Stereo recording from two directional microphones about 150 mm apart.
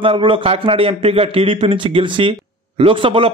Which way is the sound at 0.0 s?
35° right (ahead or behind).